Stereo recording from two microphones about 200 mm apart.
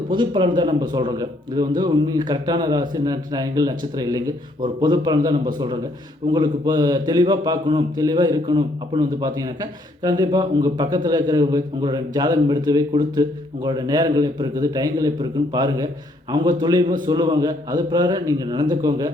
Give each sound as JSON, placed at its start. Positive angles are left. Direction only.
{"t": 0.1, "sound": "a man's voice", "side_deg": -25}